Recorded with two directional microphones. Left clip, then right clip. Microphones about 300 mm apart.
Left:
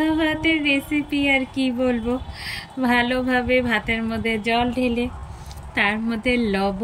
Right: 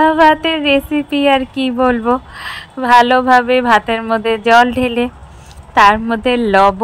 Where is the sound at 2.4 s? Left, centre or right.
Centre.